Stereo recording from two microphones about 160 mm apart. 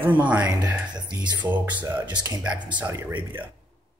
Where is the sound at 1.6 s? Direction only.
30° right (ahead or behind).